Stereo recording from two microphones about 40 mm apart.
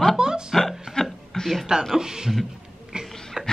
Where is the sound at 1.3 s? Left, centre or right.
Centre.